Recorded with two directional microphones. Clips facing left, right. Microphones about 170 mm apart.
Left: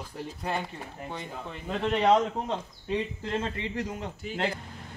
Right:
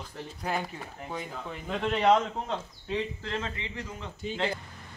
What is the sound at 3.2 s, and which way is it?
Speech, 25° left (ahead or behind).